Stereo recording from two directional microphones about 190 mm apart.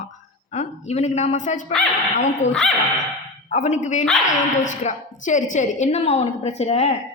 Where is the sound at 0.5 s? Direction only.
35° left (ahead or behind).